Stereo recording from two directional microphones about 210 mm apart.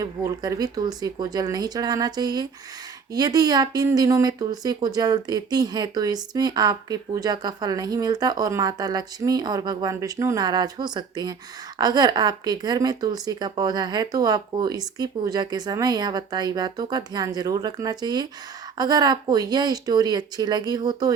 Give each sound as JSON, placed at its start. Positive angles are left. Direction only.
{"t": 0.0, "sound": "speech", "side_deg": -15}